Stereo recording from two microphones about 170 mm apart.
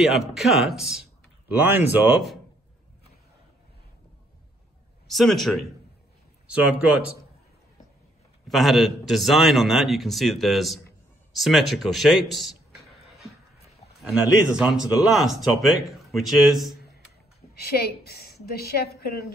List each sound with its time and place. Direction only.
0.3 s speech: centre (ahead or behind)
5.0 s speech: centre (ahead or behind)
8.5 s a man's voice: centre (ahead or behind)
17.6 s a woman's voice: 70° left (ahead or behind)